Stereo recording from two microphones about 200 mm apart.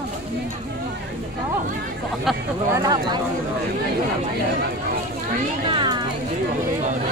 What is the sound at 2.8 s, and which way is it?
Speech, 20° right (ahead or behind).